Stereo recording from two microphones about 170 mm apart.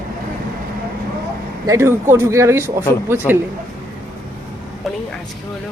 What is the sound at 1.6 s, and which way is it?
Speech, 15° right (ahead or behind).